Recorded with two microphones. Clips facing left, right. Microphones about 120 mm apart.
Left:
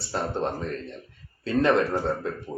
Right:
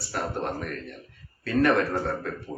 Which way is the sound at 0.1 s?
25° left (ahead or behind).